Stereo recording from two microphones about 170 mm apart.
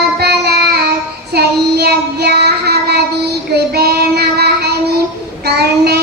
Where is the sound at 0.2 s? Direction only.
70° right (ahead or behind).